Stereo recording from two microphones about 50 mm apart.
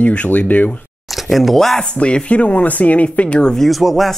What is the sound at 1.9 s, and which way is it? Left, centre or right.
Speech, left.